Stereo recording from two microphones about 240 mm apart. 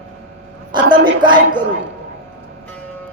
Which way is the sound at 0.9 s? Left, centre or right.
Centre.